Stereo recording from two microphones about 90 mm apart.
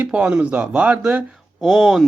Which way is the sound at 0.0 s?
15° right (ahead or behind).